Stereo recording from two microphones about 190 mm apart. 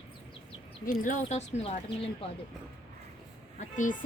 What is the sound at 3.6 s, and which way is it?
Speech, 40° left (ahead or behind).